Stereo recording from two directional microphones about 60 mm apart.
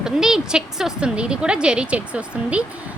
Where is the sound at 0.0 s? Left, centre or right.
Centre.